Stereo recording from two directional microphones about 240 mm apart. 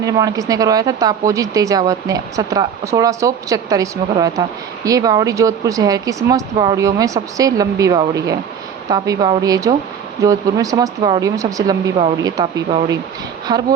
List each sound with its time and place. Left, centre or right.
0.0 s a woman's voice: centre